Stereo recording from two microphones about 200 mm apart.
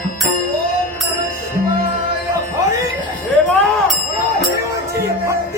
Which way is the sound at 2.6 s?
15° right (ahead or behind).